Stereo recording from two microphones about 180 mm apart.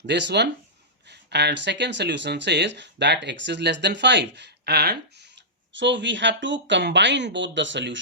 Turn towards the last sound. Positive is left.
turn(degrees=-85)